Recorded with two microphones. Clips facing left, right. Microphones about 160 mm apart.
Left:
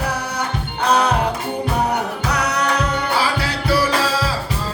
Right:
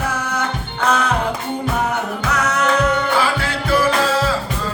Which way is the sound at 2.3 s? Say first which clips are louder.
Right 3 dB; 35° left (ahead or behind).